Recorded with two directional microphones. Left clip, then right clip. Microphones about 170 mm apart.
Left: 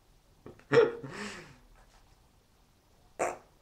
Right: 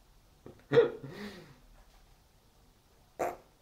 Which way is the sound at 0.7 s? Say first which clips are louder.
Left 1 dB; centre (ahead or behind).